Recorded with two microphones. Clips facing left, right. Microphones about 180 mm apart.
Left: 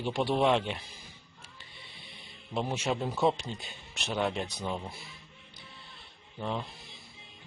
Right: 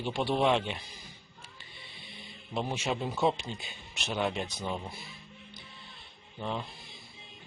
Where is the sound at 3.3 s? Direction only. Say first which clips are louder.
Even; 35° left (ahead or behind).